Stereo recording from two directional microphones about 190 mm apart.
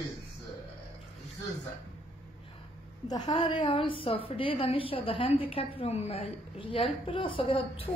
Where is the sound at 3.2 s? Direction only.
30° left (ahead or behind).